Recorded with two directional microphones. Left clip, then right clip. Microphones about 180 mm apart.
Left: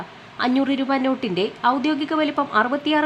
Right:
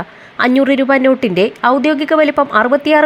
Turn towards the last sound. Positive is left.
turn(degrees=-30)  # may be behind; listen again after turning